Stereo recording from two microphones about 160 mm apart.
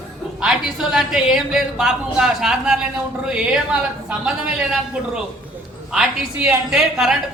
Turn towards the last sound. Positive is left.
turn(degrees=0)  # may be behind; listen again after turning